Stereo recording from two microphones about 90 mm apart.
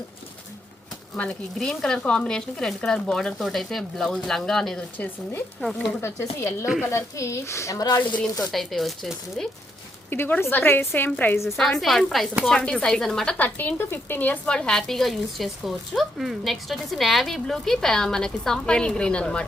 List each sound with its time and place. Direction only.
1.1 s speech: 15° left (ahead or behind)
6.0 s a woman's voice: 30° left (ahead or behind); by 8.2 s 45° left (ahead or behind)
8.2 s speech: 5° left (ahead or behind)
10.1 s a woman's voice: 20° left (ahead or behind)
11.4 s a woman's voice: 5° left (ahead or behind)
13.3 s a woman's voice: 20° left (ahead or behind)